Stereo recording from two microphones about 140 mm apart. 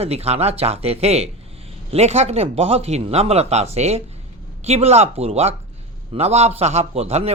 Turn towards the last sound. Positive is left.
turn(degrees=-50)  # may be behind; listen again after turning